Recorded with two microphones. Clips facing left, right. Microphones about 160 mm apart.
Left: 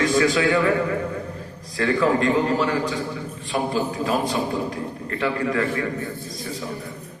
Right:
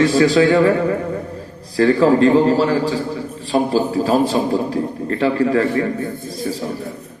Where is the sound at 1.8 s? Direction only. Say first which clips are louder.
Right 7 dB; 35° right (ahead or behind).